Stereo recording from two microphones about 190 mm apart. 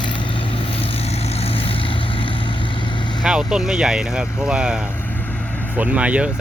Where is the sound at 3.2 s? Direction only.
5° right (ahead or behind).